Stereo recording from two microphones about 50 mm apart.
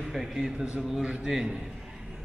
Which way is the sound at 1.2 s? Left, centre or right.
Centre.